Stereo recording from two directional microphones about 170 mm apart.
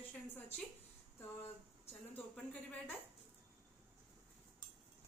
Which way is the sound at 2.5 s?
5° left (ahead or behind).